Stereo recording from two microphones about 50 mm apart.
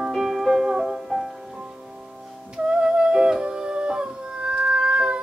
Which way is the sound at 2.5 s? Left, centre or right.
Centre.